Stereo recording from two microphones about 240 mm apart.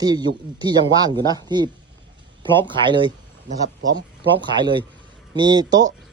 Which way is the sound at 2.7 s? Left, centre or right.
Centre.